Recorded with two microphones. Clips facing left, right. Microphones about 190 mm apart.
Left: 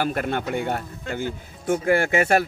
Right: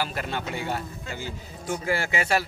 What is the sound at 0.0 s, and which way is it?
A man's voice, 55° left (ahead or behind).